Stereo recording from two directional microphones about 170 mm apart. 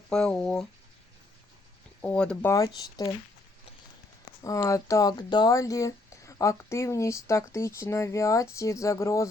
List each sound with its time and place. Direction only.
0.1 s speech: 5° left (ahead or behind)
2.0 s speech: 5° left (ahead or behind)
4.4 s speech: 20° left (ahead or behind)